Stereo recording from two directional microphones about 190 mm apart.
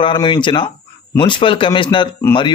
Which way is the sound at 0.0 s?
25° left (ahead or behind).